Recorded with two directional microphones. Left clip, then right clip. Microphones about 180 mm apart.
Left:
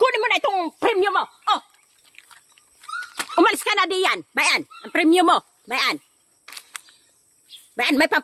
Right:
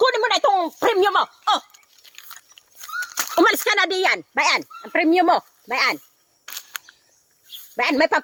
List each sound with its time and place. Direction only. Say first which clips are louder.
0.0 s a sound: right 1 dB; 5° right (ahead or behind)
0.9 s dog: right 2 dB; 20° right (ahead or behind)
1.2 s a sound: right 2 dB; 35° right (ahead or behind)
3.3 s speech: right 1 dB; 10° right (ahead or behind); by 5.9 s 10° left (ahead or behind)
6.4 s single-lens reflex camera: right 4 dB; 5° right (ahead or behind)
7.8 s speech: right 1 dB; 5° left (ahead or behind)